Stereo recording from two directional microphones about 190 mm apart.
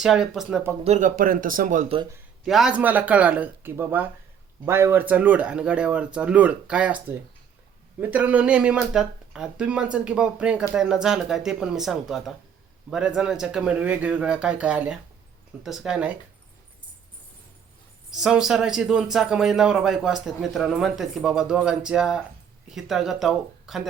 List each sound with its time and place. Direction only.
0.0 s speech: centre (ahead or behind)
0.9 s speech: 40° right (ahead or behind)
2.1 s speech: centre (ahead or behind)
18.1 s speech: 5° right (ahead or behind)